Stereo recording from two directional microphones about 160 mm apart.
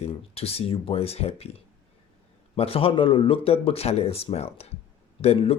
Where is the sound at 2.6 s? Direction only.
35° left (ahead or behind).